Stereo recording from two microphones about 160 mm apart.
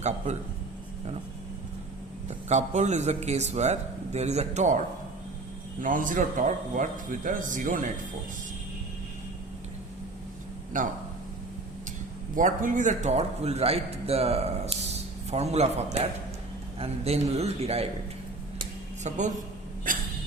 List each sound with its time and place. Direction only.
2.2 s a man's voice: 45° right (ahead or behind)
5.8 s a man's voice: 55° right (ahead or behind)
10.8 s a man's voice: 55° right (ahead or behind)
12.4 s a man's voice: 55° right (ahead or behind); by 17.8 s 40° right (ahead or behind)
19.0 s a man's voice: 50° right (ahead or behind)